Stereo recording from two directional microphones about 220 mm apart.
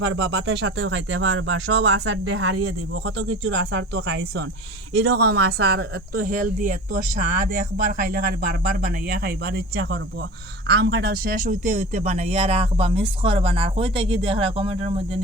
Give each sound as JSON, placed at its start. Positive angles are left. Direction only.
{"t": 0.0, "sound": "speech", "side_deg": -60}